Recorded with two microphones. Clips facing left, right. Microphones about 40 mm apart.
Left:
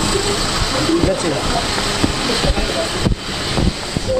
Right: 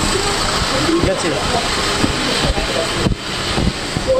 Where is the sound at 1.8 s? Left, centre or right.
Right.